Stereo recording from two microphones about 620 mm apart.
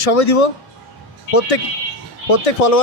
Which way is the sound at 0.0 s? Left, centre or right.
Left.